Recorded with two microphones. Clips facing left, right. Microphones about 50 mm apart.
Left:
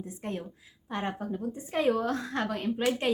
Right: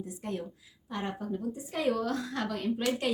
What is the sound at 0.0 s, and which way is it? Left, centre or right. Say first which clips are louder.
A woman's voice: even; left.